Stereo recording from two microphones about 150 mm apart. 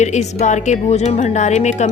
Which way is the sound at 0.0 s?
50° left (ahead or behind).